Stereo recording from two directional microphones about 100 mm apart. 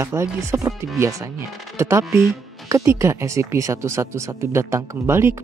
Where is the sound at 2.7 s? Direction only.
30° right (ahead or behind).